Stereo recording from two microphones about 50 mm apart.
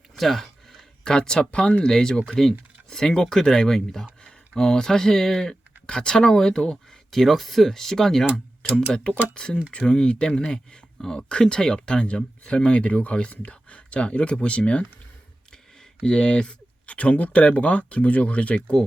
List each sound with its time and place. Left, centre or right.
0.2 s a sound: centre
1.0 s speech: centre
7.1 s speech: centre
8.7 s speech: centre
16.0 s speech: centre